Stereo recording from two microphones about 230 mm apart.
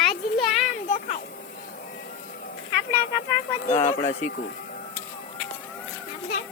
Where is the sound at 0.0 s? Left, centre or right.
Centre.